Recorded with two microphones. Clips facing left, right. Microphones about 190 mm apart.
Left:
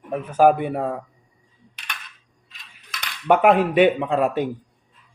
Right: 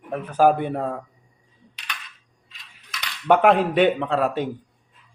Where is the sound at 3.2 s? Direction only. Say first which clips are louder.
Left 1 dB; 5° left (ahead or behind).